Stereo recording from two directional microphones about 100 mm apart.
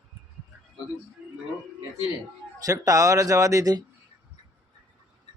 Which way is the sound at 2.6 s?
35° right (ahead or behind).